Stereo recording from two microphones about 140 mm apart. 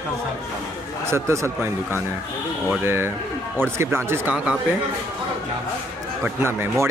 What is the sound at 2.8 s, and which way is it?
Speech, 15° right (ahead or behind).